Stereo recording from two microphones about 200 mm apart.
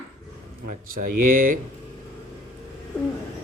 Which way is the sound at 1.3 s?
45° right (ahead or behind).